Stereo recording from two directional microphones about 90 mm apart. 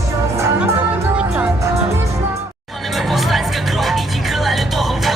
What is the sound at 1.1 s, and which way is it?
Music, 15° right (ahead or behind).